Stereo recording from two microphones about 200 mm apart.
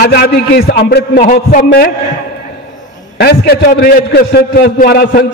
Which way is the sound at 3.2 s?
50° left (ahead or behind).